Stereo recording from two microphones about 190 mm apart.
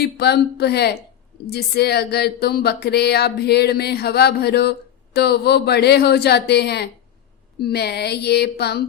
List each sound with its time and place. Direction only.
0.0 s speech: 60° left (ahead or behind)